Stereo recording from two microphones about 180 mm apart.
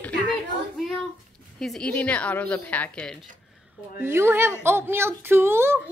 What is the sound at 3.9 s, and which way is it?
A woman's voice, 15° right (ahead or behind).